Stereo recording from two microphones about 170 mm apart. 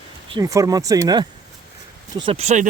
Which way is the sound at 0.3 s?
20° right (ahead or behind).